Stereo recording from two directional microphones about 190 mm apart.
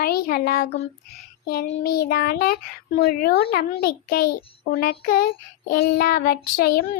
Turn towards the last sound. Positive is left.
turn(degrees=55)  # may be behind; listen again after turning